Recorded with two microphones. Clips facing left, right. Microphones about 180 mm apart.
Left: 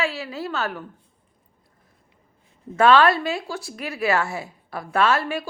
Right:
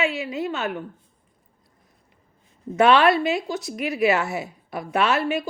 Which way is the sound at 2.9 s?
20° right (ahead or behind).